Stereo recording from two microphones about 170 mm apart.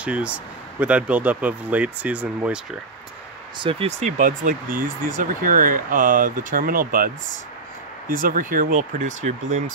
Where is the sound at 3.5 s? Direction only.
30° right (ahead or behind).